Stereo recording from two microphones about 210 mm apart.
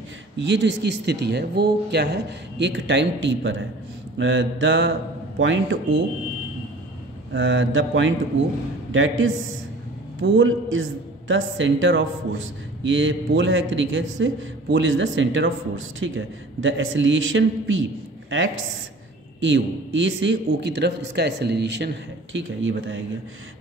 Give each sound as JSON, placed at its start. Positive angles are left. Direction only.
{"t": 0.4, "sound": "a man's voice", "side_deg": -60}
{"t": 7.3, "sound": "a man's voice", "side_deg": -65}
{"t": 19.4, "sound": "a man's voice", "side_deg": -60}